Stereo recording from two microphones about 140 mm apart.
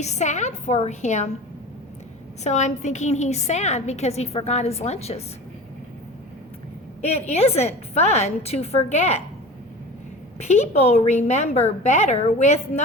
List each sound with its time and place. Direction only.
0.0 s a woman's voice: 55° left (ahead or behind)
2.4 s a woman's voice: 55° left (ahead or behind)
7.0 s a woman's voice: 50° left (ahead or behind)
10.4 s a woman's voice: 50° left (ahead or behind)